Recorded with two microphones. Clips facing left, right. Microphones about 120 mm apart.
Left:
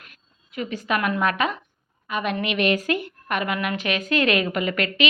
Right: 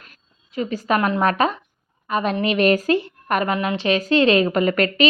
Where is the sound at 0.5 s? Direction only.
35° right (ahead or behind).